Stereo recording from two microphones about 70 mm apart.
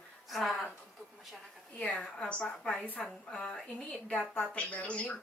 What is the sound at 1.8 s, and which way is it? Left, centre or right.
Speech, centre.